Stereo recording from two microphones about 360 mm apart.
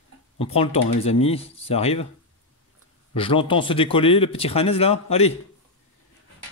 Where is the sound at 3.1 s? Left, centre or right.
Centre.